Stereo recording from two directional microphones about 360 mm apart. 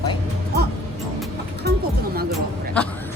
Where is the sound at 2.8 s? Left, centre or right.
Centre.